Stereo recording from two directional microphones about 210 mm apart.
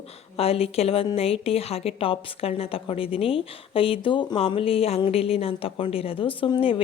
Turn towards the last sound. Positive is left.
turn(degrees=25)  # may be behind; listen again after turning